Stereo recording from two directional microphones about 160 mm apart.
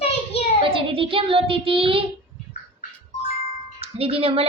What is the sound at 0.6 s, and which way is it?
Speech, 35° right (ahead or behind).